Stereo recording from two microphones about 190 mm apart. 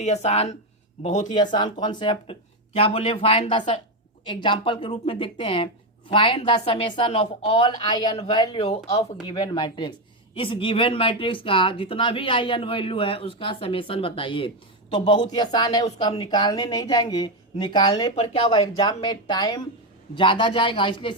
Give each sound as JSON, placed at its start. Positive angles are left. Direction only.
{"t": 0.0, "sound": "speech", "side_deg": 35}
{"t": 1.5, "sound": "speech", "side_deg": 25}
{"t": 9.3, "sound": "speech", "side_deg": 20}
{"t": 18.1, "sound": "speech", "side_deg": 30}